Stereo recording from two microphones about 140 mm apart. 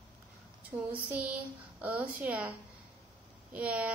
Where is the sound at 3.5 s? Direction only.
10° right (ahead or behind).